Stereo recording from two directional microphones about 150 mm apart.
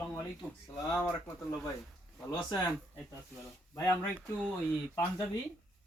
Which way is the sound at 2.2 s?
5° left (ahead or behind).